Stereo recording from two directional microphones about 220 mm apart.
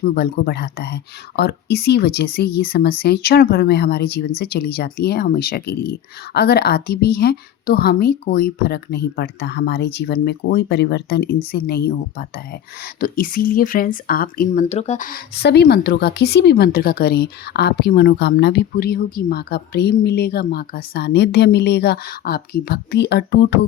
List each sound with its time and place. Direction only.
0.0 s a woman's voice: 45° left (ahead or behind)